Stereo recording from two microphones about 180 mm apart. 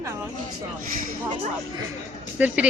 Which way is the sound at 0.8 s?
50° right (ahead or behind).